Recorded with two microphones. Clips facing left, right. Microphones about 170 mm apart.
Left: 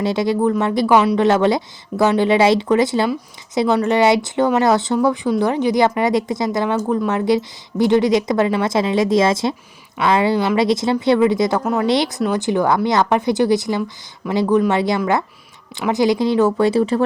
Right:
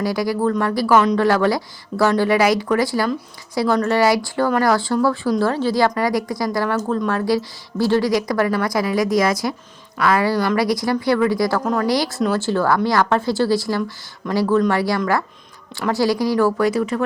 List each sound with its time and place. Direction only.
0.0 s a woman's voice: 25° left (ahead or behind)
11.6 s speech: 5° left (ahead or behind)
11.9 s a woman's voice: 20° left (ahead or behind)